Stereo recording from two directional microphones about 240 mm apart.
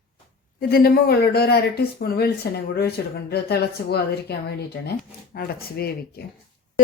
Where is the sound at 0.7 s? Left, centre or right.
Left.